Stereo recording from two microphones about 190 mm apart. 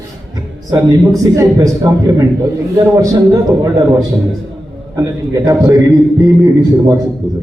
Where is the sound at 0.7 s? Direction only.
20° right (ahead or behind).